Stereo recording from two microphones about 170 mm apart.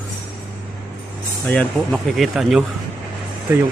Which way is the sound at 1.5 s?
5° left (ahead or behind).